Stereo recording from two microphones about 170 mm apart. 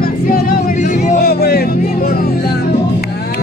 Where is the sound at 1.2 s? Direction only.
65° left (ahead or behind).